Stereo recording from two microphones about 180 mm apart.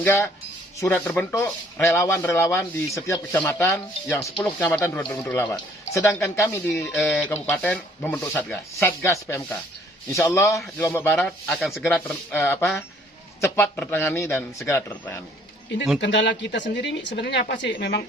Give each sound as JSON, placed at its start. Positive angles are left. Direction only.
{"t": 0.0, "sound": "speech", "side_deg": 15}
{"t": 6.9, "sound": "speech", "side_deg": 0}
{"t": 16.0, "sound": "speech", "side_deg": 80}